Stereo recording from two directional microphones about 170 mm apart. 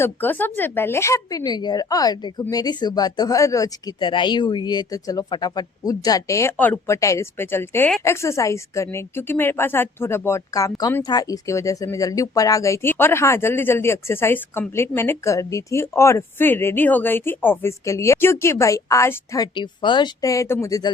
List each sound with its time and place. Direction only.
0.0 s a woman's voice: 10° left (ahead or behind)
19.5 s speech: 30° left (ahead or behind)